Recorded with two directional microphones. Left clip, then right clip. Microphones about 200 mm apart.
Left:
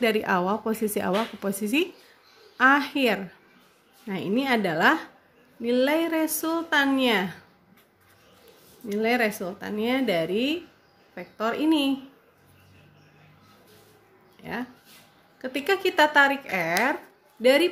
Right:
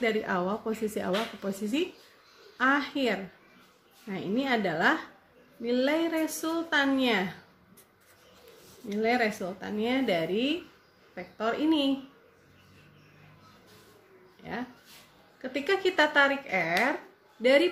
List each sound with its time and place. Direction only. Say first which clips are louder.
0.0 s speech: left 5 dB; 45° left (ahead or behind)
8.8 s speech: left 3 dB; 35° left (ahead or behind)
14.4 s speech: left 4 dB; 35° left (ahead or behind)